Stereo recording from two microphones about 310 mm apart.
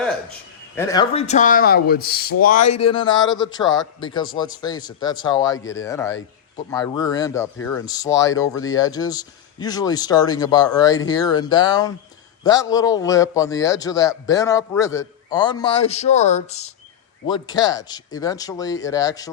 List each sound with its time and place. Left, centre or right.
0.8 s a man's voice: centre